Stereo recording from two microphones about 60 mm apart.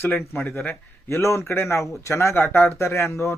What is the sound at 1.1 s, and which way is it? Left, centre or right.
A man's voice, left.